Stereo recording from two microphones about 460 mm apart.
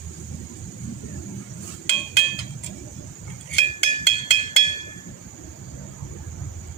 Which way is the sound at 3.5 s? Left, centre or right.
Left.